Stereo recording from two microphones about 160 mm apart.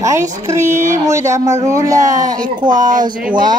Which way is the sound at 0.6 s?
50° right (ahead or behind).